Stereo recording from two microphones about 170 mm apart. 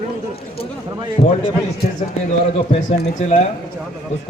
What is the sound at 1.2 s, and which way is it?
Speech, 35° left (ahead or behind).